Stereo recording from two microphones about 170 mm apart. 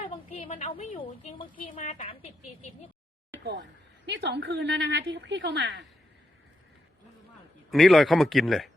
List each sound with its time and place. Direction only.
0.0 s a sound: 35° left (ahead or behind)
1.5 s a woman's voice: 50° left (ahead or behind)
2.0 s a woman's voice: 35° left (ahead or behind)
3.4 s a woman's voice: 90° right
7.7 s speech: centre (ahead or behind)